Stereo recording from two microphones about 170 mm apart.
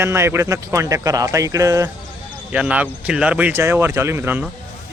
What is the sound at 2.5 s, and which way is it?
Speech, 10° right (ahead or behind).